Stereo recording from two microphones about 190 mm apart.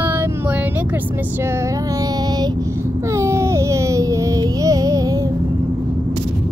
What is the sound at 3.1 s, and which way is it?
Music, 15° right (ahead or behind).